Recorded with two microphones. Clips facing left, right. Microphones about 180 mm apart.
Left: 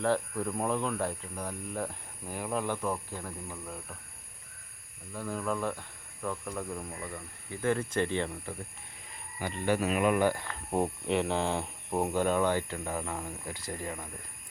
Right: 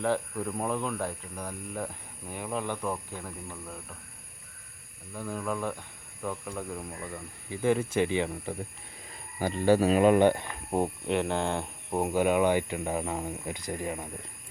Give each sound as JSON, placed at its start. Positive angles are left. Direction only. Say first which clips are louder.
{"t": 0.0, "sound": "speech", "louder": "even", "side_deg": 0}
{"t": 5.1, "sound": "speech", "louder": "even", "side_deg": -5}
{"t": 9.4, "sound": "speech", "louder": "right 6 dB", "side_deg": -35}
{"t": 10.7, "sound": "speech", "louder": "right 1 dB", "side_deg": 0}